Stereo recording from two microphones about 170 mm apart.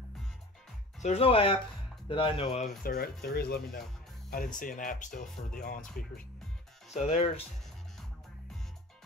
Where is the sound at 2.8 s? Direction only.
65° left (ahead or behind).